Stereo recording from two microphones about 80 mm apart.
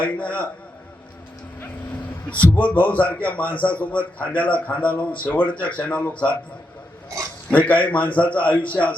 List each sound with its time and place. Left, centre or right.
0.0 s a man's voice: centre
2.3 s a man's voice: centre
7.5 s a man's voice: centre